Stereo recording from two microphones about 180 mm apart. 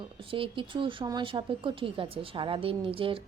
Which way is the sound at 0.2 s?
30° right (ahead or behind).